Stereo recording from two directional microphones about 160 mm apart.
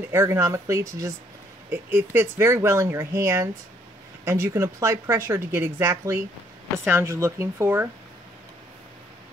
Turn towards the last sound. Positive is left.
turn(degrees=-15)  # may be behind; listen again after turning